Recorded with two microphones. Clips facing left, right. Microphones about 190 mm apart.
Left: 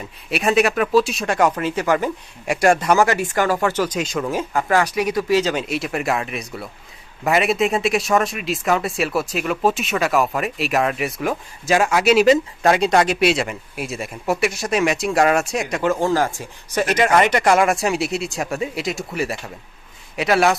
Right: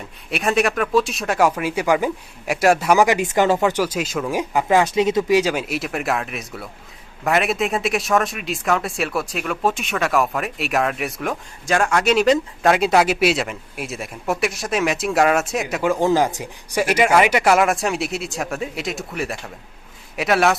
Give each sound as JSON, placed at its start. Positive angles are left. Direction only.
{"t": 0.3, "sound": "speech", "side_deg": 0}
{"t": 5.4, "sound": "speech", "side_deg": -10}